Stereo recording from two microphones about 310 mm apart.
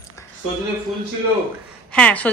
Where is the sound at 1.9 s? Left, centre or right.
Centre.